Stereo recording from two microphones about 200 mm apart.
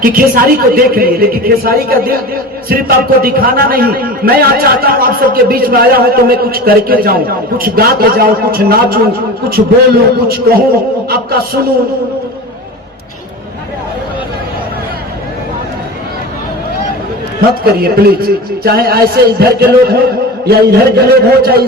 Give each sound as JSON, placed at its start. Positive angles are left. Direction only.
{"t": 0.0, "sound": "a man's voice", "side_deg": -45}
{"t": 17.7, "sound": "a man's voice", "side_deg": -50}